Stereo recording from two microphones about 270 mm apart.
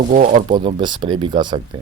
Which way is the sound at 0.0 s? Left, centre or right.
Right.